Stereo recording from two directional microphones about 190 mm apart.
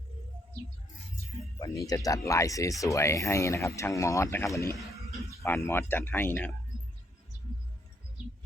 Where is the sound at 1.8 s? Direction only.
20° left (ahead or behind).